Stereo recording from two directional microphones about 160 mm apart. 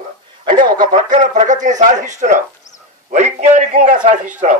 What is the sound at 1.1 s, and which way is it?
A man's voice, 50° right (ahead or behind).